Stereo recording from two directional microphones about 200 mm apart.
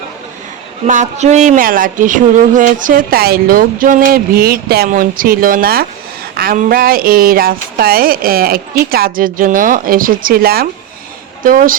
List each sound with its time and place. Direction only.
0.9 s speech: 35° right (ahead or behind)